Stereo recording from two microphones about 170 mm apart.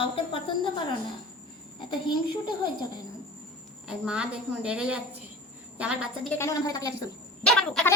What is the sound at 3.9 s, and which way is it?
A woman's voice, 5° right (ahead or behind).